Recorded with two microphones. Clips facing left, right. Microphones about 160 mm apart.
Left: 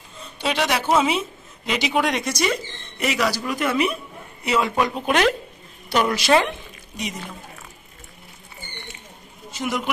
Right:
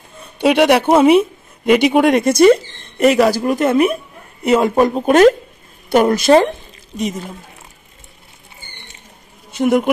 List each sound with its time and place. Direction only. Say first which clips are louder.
0.4 s speech: right 11 dB; 60° right (ahead or behind)
9.5 s speech: right 12 dB; 55° right (ahead or behind)